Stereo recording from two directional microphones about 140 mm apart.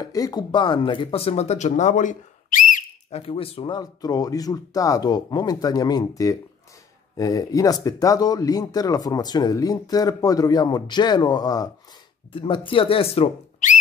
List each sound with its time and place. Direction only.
0.0 s speech: 25° left (ahead or behind); by 2.8 s 70° left (ahead or behind)
3.1 s speech: 40° left (ahead or behind); by 11.7 s 25° left (ahead or behind)
12.3 s speech: 35° left (ahead or behind)
13.6 s a sound: 65° left (ahead or behind)